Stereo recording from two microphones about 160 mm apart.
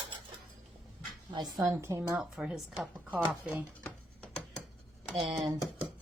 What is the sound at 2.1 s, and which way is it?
Speech, 5° right (ahead or behind).